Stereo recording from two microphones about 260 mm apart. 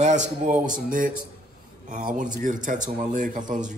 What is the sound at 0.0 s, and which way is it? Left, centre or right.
Speech, right.